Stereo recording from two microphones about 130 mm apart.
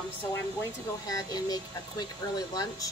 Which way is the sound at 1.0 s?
30° left (ahead or behind).